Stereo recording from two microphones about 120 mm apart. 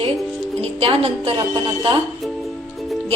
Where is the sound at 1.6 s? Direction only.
45° right (ahead or behind).